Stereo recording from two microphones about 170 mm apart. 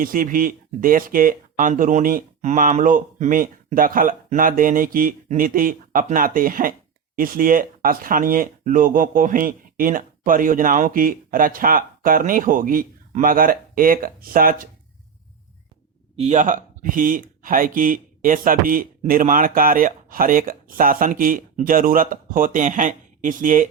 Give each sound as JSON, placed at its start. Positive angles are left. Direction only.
{"t": 0.0, "sound": "speech", "side_deg": -55}
{"t": 16.1, "sound": "speech", "side_deg": -40}